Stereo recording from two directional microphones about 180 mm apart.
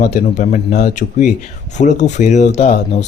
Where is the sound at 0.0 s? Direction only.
40° left (ahead or behind).